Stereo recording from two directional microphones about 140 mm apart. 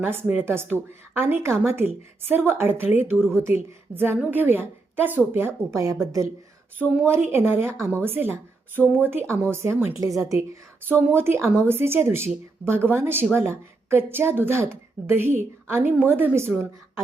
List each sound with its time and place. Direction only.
0.0 s a woman's voice: 15° right (ahead or behind)
7.3 s a woman's voice: 20° right (ahead or behind)